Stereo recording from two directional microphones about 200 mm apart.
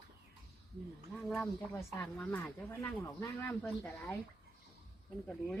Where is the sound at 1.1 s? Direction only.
5° left (ahead or behind).